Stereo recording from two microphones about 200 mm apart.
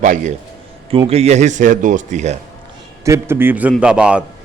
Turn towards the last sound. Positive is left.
turn(degrees=-5)  # may be behind; listen again after turning